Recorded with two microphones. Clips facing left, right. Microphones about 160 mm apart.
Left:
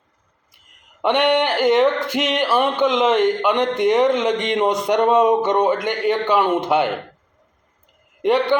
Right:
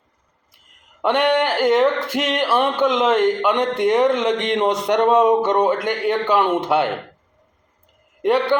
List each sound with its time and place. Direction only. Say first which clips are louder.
1.0 s a man's voice: even; 5° right (ahead or behind)
8.2 s a man's voice: even; 5° right (ahead or behind)